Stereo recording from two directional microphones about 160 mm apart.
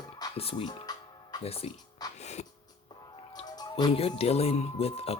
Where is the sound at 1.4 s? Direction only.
40° left (ahead or behind).